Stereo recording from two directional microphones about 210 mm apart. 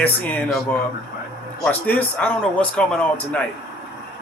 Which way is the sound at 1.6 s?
5° left (ahead or behind).